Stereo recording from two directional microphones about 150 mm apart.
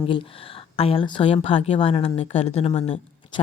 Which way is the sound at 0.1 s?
40° left (ahead or behind).